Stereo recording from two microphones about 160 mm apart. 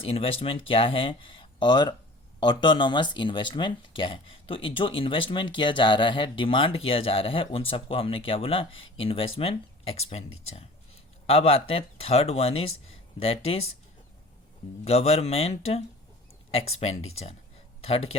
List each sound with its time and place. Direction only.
0.0 s speech: 35° left (ahead or behind)
14.8 s speech: 40° left (ahead or behind)